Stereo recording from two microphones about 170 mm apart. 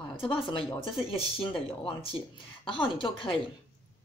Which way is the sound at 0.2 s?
30° left (ahead or behind).